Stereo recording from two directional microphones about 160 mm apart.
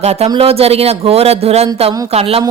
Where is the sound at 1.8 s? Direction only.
25° right (ahead or behind).